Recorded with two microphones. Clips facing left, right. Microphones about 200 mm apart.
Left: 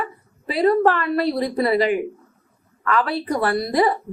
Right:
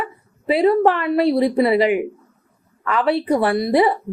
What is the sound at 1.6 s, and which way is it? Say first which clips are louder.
Speech: right 2 dB; 15° right (ahead or behind).